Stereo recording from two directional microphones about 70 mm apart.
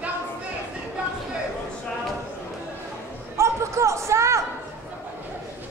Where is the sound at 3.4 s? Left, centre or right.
Right.